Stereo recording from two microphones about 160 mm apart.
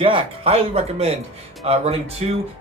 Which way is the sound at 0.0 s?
35° right (ahead or behind).